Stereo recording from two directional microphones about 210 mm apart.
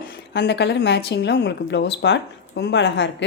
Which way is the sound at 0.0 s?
45° left (ahead or behind).